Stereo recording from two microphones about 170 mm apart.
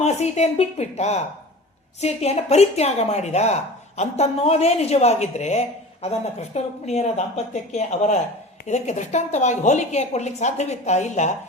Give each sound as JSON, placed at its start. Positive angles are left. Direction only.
{"t": 0.0, "sound": "a woman's voice", "side_deg": 40}